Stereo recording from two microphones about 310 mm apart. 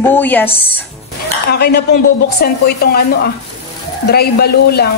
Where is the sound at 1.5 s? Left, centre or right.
Left.